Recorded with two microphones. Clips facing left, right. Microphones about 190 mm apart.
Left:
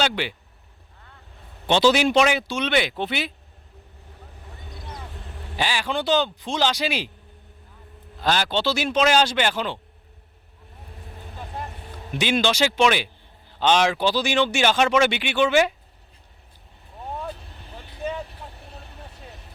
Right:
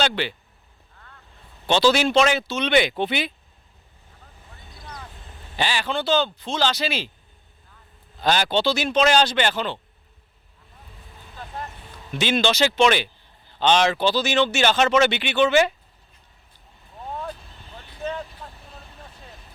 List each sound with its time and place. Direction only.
0.0 s speech: 10° left (ahead or behind)
1.6 s speech: 20° left (ahead or behind)
5.3 s vehicle: 70° left (ahead or behind)
5.5 s speech: 10° left (ahead or behind)
8.2 s speech: centre (ahead or behind)
12.1 s speech: 10° left (ahead or behind)